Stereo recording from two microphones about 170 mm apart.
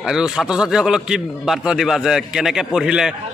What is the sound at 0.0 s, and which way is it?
A woman's voice, 5° right (ahead or behind).